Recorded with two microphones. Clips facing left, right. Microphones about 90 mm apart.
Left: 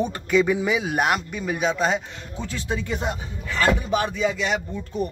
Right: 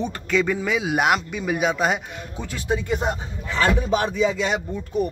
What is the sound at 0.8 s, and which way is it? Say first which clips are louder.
Speech: right 2 dB; 5° right (ahead or behind).